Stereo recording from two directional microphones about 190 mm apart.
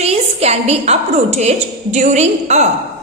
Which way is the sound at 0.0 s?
35° right (ahead or behind).